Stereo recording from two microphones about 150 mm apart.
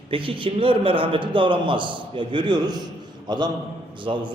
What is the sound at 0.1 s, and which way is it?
A man's voice, 35° right (ahead or behind).